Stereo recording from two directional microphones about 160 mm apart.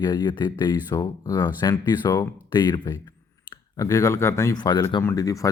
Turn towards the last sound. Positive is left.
turn(degrees=20)  # may be behind; listen again after turning